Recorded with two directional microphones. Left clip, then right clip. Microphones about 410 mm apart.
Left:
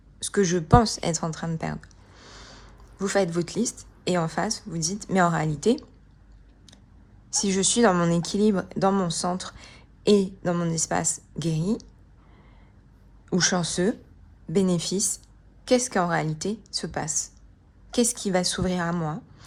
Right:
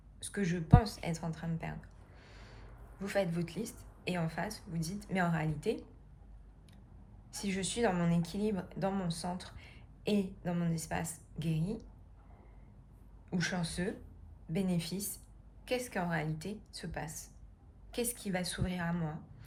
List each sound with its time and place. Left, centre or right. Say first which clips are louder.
0.2 s a woman's voice: left 14 dB; centre
7.3 s a woman's voice: left 14 dB; centre
13.3 s a woman's voice: left 13 dB; centre